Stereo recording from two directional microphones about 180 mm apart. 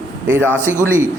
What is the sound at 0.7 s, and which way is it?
Speech, 15° left (ahead or behind).